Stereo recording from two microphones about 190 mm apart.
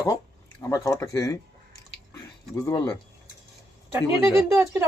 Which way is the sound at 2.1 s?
15° left (ahead or behind).